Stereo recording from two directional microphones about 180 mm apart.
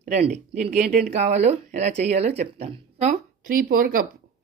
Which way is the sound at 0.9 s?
60° right (ahead or behind).